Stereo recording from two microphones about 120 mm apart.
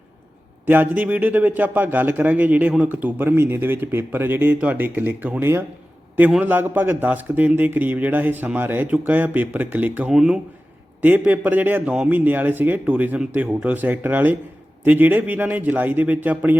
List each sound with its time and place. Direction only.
0.6 s a man's voice: 15° right (ahead or behind)